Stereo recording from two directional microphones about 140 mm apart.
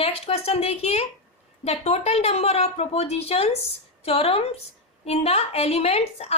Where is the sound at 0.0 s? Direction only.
45° left (ahead or behind).